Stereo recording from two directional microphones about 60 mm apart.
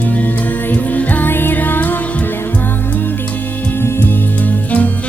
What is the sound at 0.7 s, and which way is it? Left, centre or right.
Music, left.